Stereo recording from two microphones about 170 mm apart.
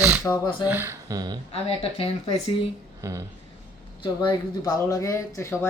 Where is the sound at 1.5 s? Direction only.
35° left (ahead or behind).